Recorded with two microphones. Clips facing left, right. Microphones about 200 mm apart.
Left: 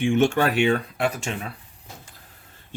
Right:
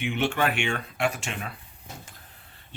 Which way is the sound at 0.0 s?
45° left (ahead or behind).